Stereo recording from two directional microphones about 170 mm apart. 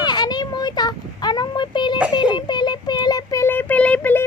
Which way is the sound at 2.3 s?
25° left (ahead or behind).